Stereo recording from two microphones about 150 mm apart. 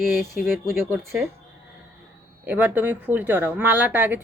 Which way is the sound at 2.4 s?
10° right (ahead or behind).